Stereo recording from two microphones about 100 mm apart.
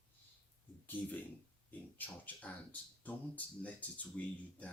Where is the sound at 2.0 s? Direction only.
15° left (ahead or behind).